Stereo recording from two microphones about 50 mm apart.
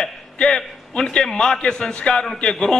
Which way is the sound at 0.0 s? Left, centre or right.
Centre.